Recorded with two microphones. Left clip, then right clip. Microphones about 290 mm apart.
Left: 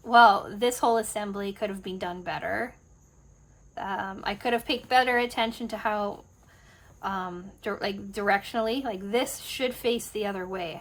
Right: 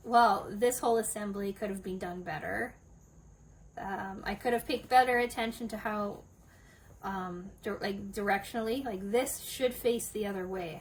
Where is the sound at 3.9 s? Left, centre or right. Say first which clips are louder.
Left 6 dB; centre.